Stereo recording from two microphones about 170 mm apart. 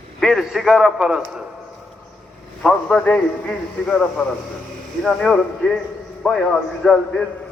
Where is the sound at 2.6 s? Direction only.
5° left (ahead or behind).